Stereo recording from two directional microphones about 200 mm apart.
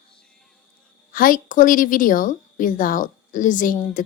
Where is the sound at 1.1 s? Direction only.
45° left (ahead or behind).